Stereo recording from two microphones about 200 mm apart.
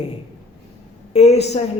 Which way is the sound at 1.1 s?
30° left (ahead or behind).